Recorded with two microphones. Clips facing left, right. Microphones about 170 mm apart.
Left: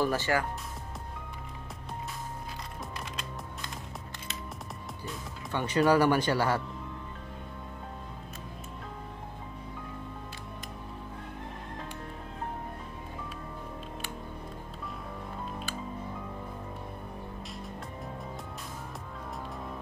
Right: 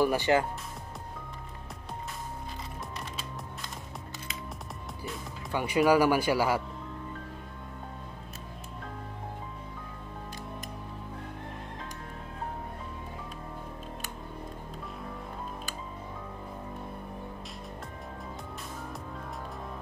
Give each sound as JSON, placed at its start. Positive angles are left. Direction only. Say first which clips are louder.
{"t": 0.0, "sound": "speech", "louder": "right 3 dB", "side_deg": -15}
{"t": 5.0, "sound": "speech", "louder": "right 2 dB", "side_deg": -10}